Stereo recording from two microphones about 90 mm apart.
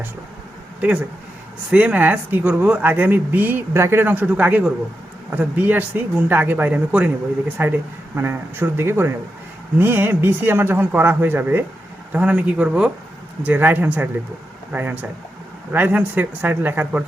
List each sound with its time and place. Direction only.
0.8 s speech: 15° right (ahead or behind)